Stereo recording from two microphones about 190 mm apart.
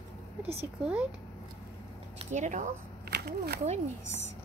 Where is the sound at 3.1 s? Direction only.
55° right (ahead or behind).